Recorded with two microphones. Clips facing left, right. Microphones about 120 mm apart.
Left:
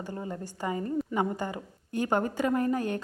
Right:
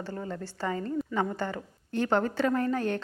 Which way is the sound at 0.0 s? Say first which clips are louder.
Even; 20° left (ahead or behind).